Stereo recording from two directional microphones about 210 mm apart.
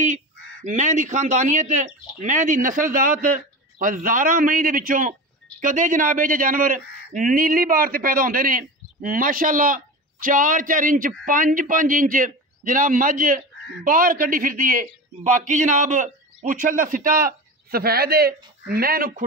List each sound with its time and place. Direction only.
0.7 s a man's voice: 35° right (ahead or behind)